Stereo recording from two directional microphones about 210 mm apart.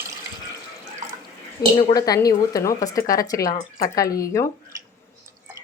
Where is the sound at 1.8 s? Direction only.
20° left (ahead or behind).